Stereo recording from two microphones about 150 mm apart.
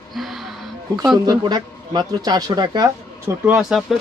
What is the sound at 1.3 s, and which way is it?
Speech, 30° right (ahead or behind).